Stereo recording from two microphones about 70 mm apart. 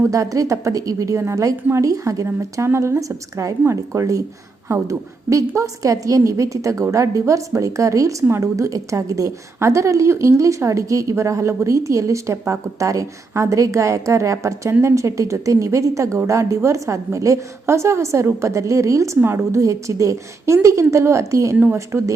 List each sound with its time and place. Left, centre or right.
0.1 s a woman's voice: right
2.2 s a woman's voice: right
19.2 s a woman's voice: right